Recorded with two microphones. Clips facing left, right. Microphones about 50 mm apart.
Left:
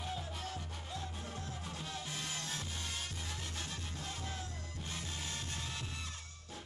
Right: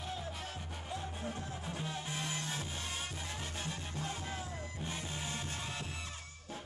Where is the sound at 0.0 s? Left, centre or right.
Centre.